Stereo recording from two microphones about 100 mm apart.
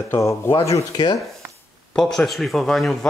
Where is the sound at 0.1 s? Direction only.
30° left (ahead or behind).